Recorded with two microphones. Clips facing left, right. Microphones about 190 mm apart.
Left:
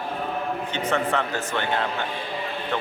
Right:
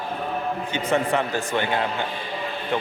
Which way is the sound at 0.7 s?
10° right (ahead or behind).